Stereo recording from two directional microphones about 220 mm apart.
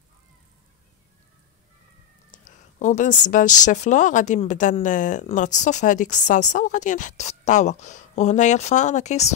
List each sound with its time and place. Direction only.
2.3 s a woman's voice: 35° left (ahead or behind)